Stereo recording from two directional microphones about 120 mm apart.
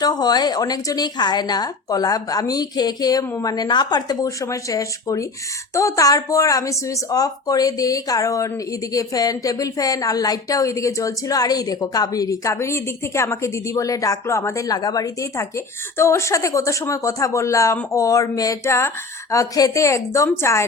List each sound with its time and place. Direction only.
0.0 s speech: 35° left (ahead or behind)